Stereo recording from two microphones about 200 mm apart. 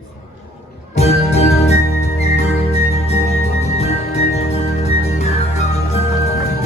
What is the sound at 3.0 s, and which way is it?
Music, 30° left (ahead or behind).